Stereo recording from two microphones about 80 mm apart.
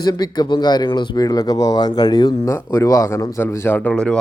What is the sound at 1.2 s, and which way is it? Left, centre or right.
Speech, left.